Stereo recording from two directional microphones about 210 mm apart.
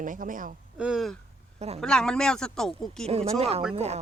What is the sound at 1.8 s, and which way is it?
Speech, 5° left (ahead or behind).